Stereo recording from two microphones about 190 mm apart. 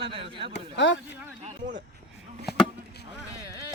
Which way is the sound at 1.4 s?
40° right (ahead or behind).